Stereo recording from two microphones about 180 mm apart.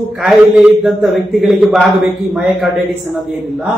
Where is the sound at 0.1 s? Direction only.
5° right (ahead or behind).